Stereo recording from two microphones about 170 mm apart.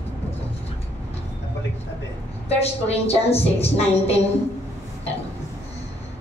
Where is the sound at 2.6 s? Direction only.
35° left (ahead or behind).